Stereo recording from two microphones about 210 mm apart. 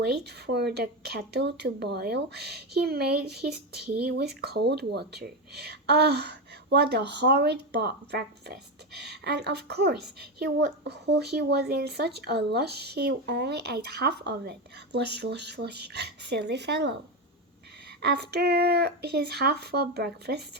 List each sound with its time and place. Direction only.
0.0 s a woman's voice: 50° right (ahead or behind)
18.0 s a woman's voice: 50° right (ahead or behind)